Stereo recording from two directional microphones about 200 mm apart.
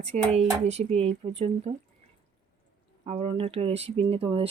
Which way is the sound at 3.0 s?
30° right (ahead or behind).